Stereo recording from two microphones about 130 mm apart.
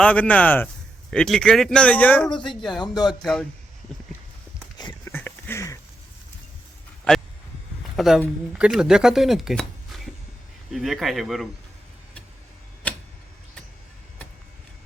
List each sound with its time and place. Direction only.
0.0 s speech: 10° left (ahead or behind)
2.6 s speech: centre (ahead or behind)
2.8 s speech: 30° left (ahead or behind)
3.2 s speech: 5° left (ahead or behind)
5.0 s a sound: 15° left (ahead or behind)
7.9 s speech: centre (ahead or behind)
10.7 s speech: centre (ahead or behind)
12.8 s tick-tock: 10° left (ahead or behind)